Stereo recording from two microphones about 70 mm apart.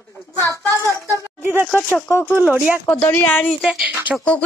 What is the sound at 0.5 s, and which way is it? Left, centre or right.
Child singing, left.